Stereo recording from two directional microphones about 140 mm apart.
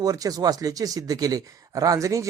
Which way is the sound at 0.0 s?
25° right (ahead or behind).